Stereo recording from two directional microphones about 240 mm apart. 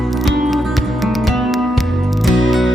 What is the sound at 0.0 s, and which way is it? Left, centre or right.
Music, centre.